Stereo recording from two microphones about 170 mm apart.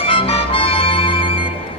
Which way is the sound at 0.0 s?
30° left (ahead or behind).